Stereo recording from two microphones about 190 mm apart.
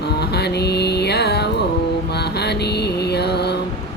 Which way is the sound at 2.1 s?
60° left (ahead or behind).